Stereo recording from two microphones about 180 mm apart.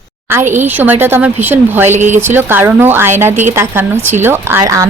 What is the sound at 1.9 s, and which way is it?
Speech, 40° right (ahead or behind).